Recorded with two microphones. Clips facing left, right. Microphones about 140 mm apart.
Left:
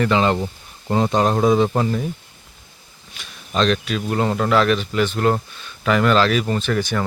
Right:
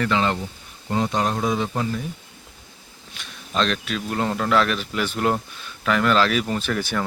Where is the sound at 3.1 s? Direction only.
Centre (ahead or behind).